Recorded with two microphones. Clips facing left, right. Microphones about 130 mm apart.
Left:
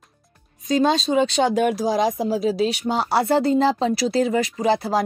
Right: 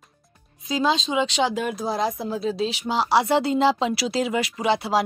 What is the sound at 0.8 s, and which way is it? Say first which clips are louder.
Speech: left 4 dB; 60° left (ahead or behind).